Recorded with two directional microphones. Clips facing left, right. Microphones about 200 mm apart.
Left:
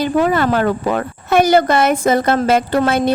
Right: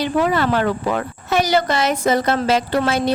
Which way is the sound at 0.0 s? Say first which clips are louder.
Left 3 dB; 50° left (ahead or behind).